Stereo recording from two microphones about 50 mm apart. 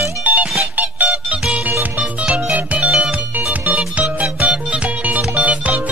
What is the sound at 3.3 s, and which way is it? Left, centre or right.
Music, right.